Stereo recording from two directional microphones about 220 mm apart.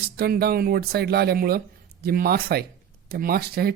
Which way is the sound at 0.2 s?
45° right (ahead or behind).